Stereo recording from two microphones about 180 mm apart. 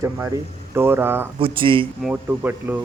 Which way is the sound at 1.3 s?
30° right (ahead or behind).